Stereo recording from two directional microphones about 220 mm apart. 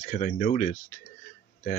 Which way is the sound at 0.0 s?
40° left (ahead or behind).